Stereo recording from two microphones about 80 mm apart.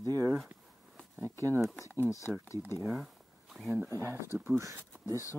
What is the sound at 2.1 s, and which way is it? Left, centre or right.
Speech, left.